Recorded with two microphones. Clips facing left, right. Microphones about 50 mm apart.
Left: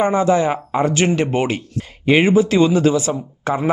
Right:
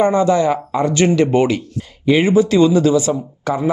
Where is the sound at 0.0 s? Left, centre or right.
Left.